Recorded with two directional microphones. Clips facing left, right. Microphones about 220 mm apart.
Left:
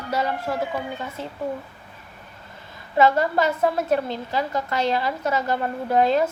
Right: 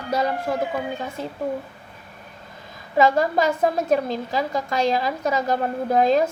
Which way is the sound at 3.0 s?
15° right (ahead or behind).